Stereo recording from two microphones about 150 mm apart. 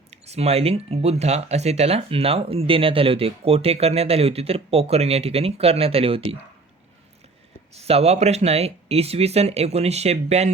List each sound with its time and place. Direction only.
0.1 s speech: 45° right (ahead or behind)
7.7 s speech: 45° right (ahead or behind)